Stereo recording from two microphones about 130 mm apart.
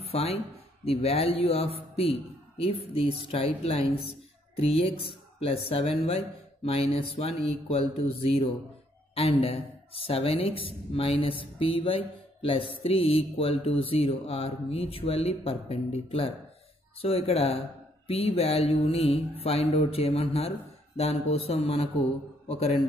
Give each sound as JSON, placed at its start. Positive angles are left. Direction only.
{"t": 0.0, "sound": "speech", "side_deg": 50}